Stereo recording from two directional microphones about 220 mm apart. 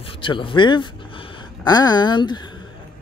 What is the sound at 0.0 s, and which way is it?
A man's voice, 25° left (ahead or behind).